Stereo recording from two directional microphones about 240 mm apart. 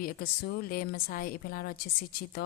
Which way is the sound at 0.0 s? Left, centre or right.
Left.